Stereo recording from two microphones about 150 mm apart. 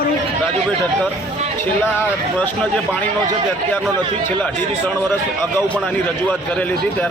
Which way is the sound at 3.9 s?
30° right (ahead or behind).